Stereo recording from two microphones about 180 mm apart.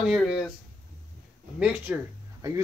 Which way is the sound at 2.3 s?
20° right (ahead or behind).